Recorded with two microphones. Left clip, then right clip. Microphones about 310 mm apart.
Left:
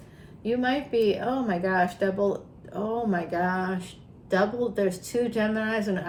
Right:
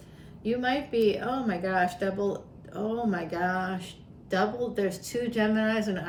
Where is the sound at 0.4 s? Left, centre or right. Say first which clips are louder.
Left 2 dB; centre.